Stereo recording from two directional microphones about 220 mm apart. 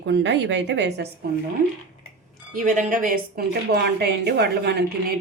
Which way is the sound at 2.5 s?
40° right (ahead or behind).